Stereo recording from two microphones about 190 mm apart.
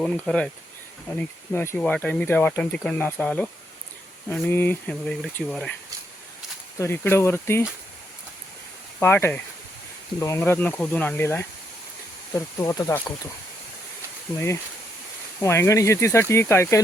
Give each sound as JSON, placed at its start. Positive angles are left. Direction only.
{"t": 0.0, "sound": "speech", "side_deg": 5}
{"t": 1.5, "sound": "speech", "side_deg": 10}
{"t": 6.7, "sound": "speech", "side_deg": 10}
{"t": 9.0, "sound": "speech", "side_deg": 10}
{"t": 14.3, "sound": "speech", "side_deg": 15}